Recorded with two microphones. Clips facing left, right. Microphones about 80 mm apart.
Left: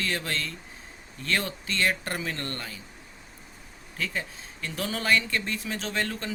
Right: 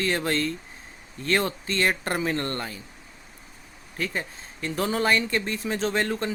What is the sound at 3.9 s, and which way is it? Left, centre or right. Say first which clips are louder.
Speech: right 2 dB; right.